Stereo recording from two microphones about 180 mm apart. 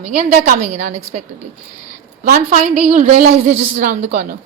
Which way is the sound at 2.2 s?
45° right (ahead or behind).